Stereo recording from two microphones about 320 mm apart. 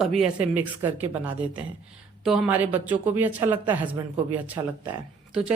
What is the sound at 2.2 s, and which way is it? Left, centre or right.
Speech, centre.